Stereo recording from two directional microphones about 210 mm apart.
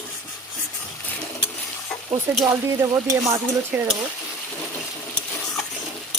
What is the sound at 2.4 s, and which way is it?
Frying, 15° right (ahead or behind).